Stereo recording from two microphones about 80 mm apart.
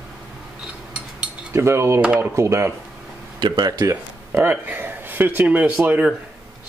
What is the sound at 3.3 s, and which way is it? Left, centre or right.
Speech, right.